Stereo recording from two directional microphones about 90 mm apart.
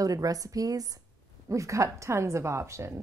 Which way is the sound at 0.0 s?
40° right (ahead or behind).